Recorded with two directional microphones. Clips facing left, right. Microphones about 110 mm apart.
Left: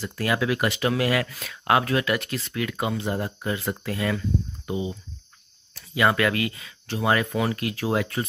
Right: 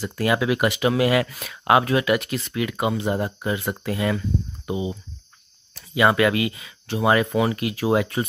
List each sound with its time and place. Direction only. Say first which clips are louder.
0.0 s speech: right 3 dB; 15° right (ahead or behind)